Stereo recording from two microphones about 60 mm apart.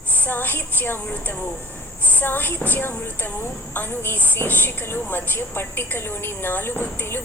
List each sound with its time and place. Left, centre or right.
0.3 s a woman's voice: left